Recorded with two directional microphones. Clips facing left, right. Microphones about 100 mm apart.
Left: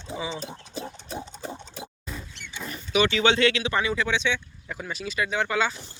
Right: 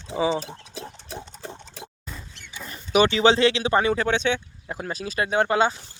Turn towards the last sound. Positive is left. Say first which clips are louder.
# right 5 dB
turn(degrees=-35)  # may be behind; listen again after turning